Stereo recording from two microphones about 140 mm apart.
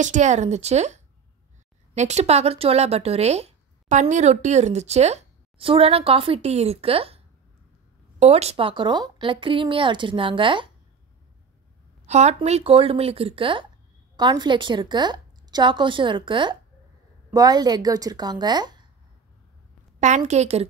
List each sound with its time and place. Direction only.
0.0 s a woman's voice: 60° right (ahead or behind)
8.2 s speech: 50° right (ahead or behind)
12.1 s a woman's voice: 55° right (ahead or behind)
12.4 s speech: 45° right (ahead or behind)
20.0 s a woman's voice: 55° right (ahead or behind)